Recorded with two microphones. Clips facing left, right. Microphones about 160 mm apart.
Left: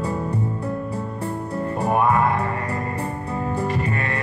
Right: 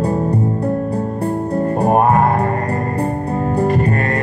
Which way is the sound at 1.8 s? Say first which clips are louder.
Right 5 dB; 40° right (ahead or behind).